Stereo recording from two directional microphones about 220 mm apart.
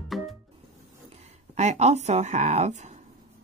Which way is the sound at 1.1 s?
30° right (ahead or behind).